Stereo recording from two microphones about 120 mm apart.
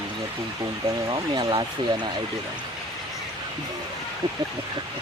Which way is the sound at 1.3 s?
40° right (ahead or behind).